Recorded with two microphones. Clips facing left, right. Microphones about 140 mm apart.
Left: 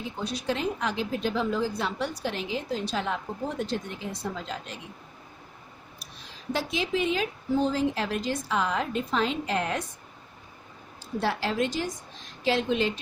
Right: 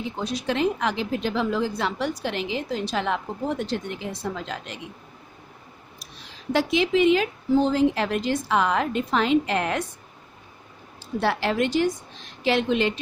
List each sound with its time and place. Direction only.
0.3 s a woman's voice: 75° right (ahead or behind)
6.5 s a woman's voice: 80° right
11.2 s a woman's voice: 70° right (ahead or behind)